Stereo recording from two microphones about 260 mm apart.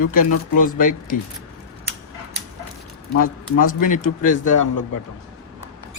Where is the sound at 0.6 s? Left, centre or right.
Left.